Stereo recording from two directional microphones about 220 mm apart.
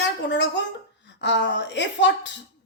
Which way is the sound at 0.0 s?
50° left (ahead or behind).